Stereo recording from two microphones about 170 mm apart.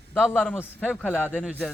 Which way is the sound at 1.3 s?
5° right (ahead or behind).